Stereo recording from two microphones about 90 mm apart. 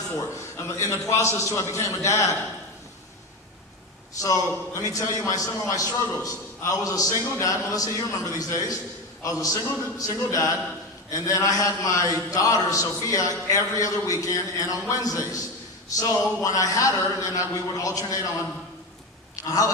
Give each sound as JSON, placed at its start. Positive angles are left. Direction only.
{"t": 0.5, "sound": "a man's voice", "side_deg": 35}
{"t": 4.2, "sound": "a man's voice", "side_deg": 35}
{"t": 19.5, "sound": "a man's voice", "side_deg": 40}